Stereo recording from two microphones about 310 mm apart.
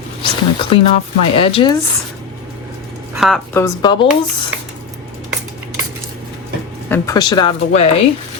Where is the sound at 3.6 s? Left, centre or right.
Centre.